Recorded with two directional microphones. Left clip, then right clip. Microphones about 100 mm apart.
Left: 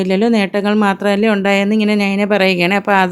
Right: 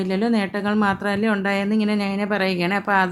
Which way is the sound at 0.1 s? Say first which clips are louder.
Left 8 dB; 35° left (ahead or behind).